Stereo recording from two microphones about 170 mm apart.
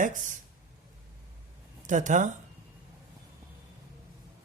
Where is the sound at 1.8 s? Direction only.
45° right (ahead or behind).